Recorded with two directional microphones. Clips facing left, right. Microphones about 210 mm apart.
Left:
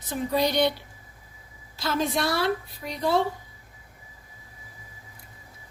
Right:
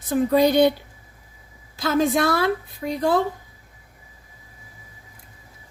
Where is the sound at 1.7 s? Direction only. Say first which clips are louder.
Right 6 dB; 50° right (ahead or behind).